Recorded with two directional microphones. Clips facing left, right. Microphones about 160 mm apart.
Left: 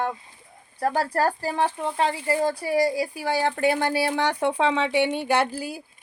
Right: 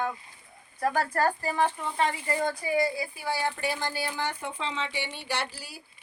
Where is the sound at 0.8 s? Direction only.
35° left (ahead or behind).